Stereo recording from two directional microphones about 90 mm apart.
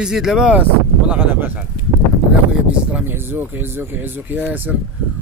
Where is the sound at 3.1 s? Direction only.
25° right (ahead or behind).